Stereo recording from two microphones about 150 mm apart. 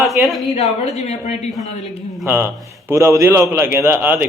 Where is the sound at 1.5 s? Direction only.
Centre (ahead or behind).